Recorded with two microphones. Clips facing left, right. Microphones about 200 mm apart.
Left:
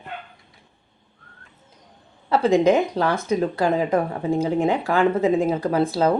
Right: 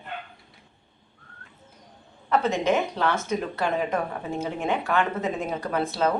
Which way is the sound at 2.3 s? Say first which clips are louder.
Left 6 dB; 30° left (ahead or behind).